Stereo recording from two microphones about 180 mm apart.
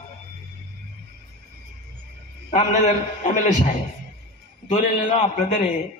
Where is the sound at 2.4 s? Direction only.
40° left (ahead or behind).